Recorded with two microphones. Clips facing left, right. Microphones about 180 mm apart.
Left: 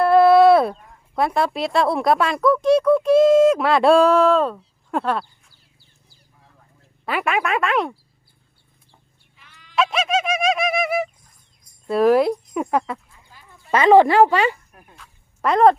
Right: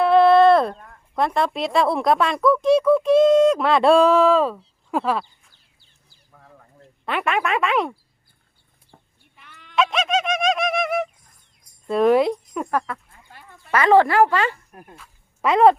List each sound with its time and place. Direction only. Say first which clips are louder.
0.0 s speech: left 1 dB; 5° left (ahead or behind)
7.0 s speech: left 1 dB; 5° left (ahead or behind)
8.9 s chicken: right 7 dB; 55° right (ahead or behind)
9.7 s bird: even; centre (ahead or behind)
11.9 s speech: left 1 dB; centre (ahead or behind)
13.7 s speech: left 3 dB; 20° left (ahead or behind)
14.9 s a sound: right 2 dB; 5° right (ahead or behind)